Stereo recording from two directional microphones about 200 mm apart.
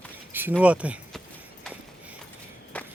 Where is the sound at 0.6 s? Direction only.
5° right (ahead or behind).